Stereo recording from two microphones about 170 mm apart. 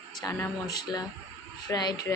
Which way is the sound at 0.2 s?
15° left (ahead or behind).